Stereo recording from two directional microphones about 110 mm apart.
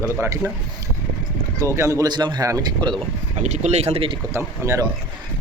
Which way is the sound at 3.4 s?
90° right.